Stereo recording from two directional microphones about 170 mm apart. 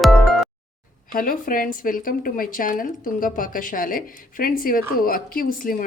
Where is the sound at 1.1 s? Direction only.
55° left (ahead or behind).